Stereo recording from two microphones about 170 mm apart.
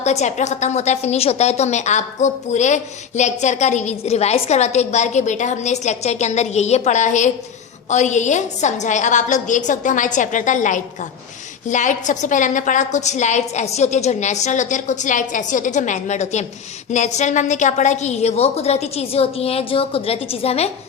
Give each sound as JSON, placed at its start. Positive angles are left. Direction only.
{"t": 0.0, "sound": "a woman's voice", "side_deg": 40}